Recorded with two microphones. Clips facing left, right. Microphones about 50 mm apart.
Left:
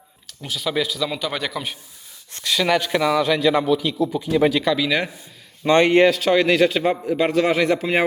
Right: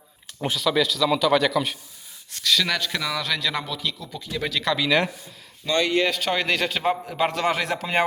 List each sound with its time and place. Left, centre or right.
0.6 s a man's voice: centre
4.6 s a man's voice: centre
5.6 s speech: left
6.1 s a man's voice: centre